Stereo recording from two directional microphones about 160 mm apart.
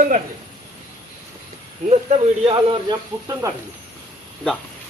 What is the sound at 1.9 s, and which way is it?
Speech, 40° right (ahead or behind).